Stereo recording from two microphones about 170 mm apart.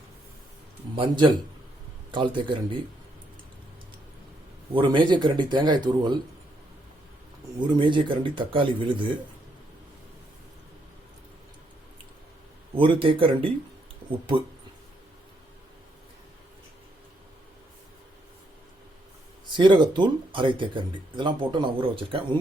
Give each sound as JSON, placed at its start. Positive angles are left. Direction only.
{"t": 0.9, "sound": "speech", "side_deg": -30}
{"t": 4.7, "sound": "speech", "side_deg": -30}
{"t": 7.6, "sound": "speech", "side_deg": -30}
{"t": 12.7, "sound": "speech", "side_deg": -30}
{"t": 19.5, "sound": "speech", "side_deg": -30}